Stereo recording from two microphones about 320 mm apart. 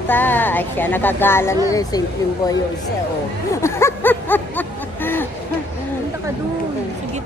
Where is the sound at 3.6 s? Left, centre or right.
Centre.